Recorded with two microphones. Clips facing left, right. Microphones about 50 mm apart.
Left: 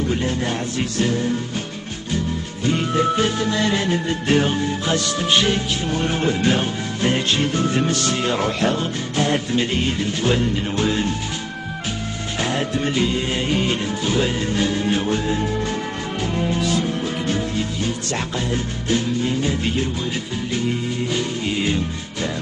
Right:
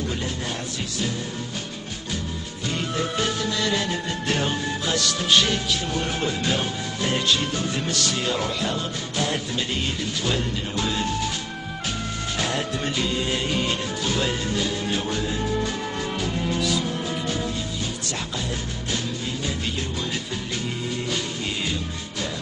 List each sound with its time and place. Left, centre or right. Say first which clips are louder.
0.1 s music: left 7 dB; left
2.6 s music: left 8 dB; left
9.1 s music: left 7 dB; left
12.4 s music: left 5 dB; left
18.1 s music: left 6 dB; left